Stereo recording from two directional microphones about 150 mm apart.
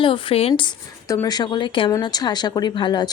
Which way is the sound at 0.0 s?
35° left (ahead or behind).